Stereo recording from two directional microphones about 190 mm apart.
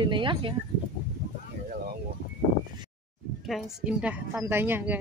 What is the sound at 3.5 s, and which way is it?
A woman's voice, centre (ahead or behind).